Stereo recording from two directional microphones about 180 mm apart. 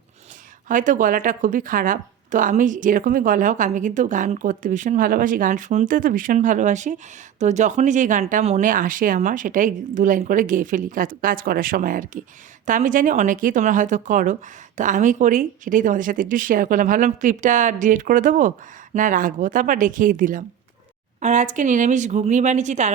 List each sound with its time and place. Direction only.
0.7 s speech: 45° right (ahead or behind)